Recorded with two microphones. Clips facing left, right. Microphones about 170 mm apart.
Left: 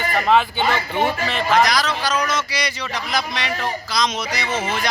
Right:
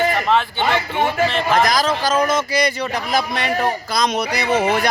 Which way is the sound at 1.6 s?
45° right (ahead or behind).